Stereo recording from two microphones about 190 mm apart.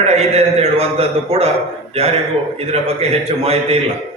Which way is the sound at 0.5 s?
30° right (ahead or behind).